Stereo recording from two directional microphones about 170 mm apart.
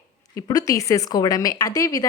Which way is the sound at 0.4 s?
20° left (ahead or behind).